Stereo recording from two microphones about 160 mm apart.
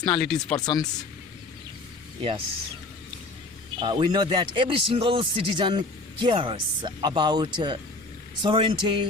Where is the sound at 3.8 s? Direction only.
30° right (ahead or behind).